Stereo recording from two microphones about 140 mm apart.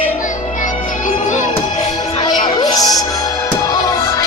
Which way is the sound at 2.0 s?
30° left (ahead or behind).